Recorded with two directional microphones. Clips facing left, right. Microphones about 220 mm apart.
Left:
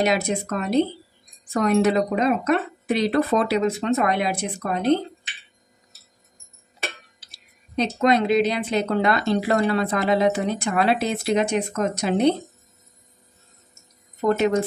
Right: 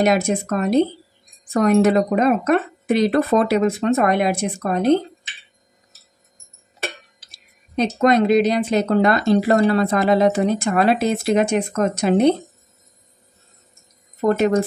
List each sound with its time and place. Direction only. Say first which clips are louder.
0.0 s speech: right 4 dB; 50° right (ahead or behind)
7.2 s speech: even; 50° right (ahead or behind)